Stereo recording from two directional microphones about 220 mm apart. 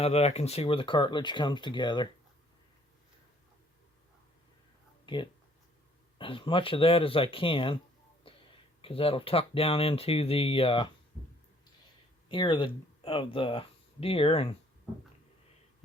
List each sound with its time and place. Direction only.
0.0 s speech: 30° left (ahead or behind)
5.0 s speech: 20° left (ahead or behind)
8.3 s a sound: 25° left (ahead or behind)
8.8 s speech: 25° left (ahead or behind)
12.3 s speech: 20° left (ahead or behind)